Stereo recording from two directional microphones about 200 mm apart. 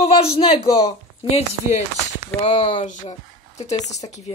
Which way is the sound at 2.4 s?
30° left (ahead or behind).